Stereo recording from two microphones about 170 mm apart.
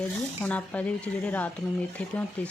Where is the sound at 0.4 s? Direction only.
10° left (ahead or behind).